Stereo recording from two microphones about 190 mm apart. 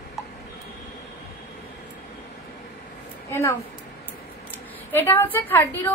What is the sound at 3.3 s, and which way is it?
Speech, 15° left (ahead or behind).